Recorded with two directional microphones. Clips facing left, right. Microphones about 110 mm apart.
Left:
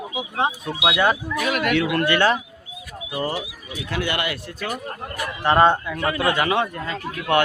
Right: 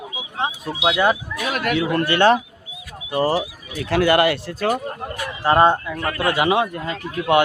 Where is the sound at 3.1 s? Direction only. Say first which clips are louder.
Right 7 dB; 30° right (ahead or behind).